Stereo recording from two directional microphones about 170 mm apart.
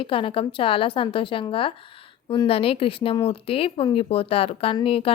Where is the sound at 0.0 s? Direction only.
30° left (ahead or behind).